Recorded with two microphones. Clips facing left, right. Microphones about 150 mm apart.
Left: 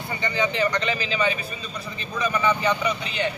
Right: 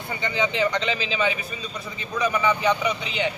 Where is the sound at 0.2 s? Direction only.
20° right (ahead or behind).